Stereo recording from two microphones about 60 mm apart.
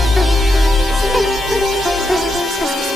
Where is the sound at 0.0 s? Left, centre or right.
Centre.